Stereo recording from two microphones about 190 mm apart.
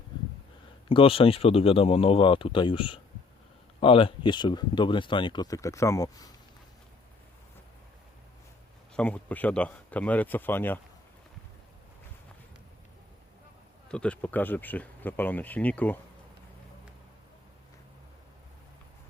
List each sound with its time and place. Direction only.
0.9 s speech: 30° left (ahead or behind)
9.0 s speech: 5° left (ahead or behind)
13.8 s speech: 5° left (ahead or behind)